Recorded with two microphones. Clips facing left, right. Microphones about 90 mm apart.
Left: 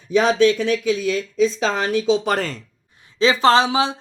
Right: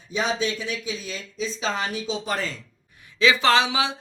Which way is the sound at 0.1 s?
75° left (ahead or behind).